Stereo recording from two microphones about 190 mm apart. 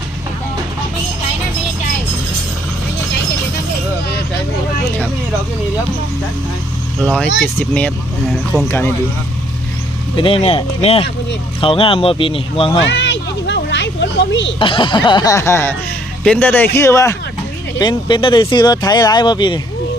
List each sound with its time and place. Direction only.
7.0 s speech: 5° left (ahead or behind)
10.2 s speech: 30° left (ahead or behind)
12.7 s a sound: 70° left (ahead or behind)
14.6 s speech: 25° left (ahead or behind)